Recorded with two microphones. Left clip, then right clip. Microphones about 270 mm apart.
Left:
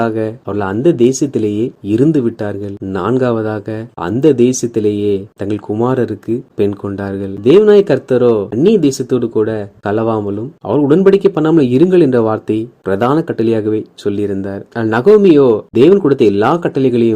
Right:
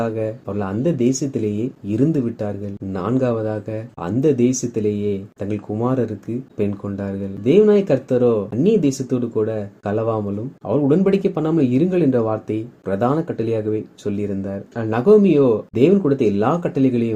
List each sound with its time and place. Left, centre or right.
0.0 s speech: left